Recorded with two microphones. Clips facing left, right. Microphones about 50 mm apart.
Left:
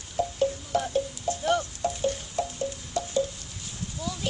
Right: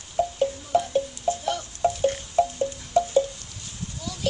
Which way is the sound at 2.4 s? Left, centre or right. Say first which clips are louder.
Right 9 dB; right.